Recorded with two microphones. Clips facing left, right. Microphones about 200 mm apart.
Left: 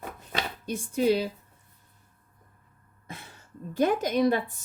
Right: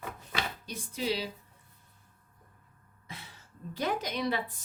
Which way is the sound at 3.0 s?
50° left (ahead or behind).